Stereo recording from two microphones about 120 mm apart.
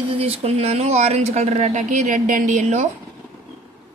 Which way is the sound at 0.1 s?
55° right (ahead or behind).